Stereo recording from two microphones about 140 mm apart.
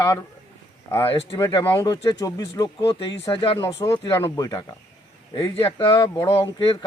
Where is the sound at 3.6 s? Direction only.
30° left (ahead or behind).